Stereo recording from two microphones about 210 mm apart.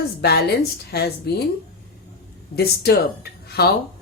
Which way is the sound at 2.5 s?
50° left (ahead or behind).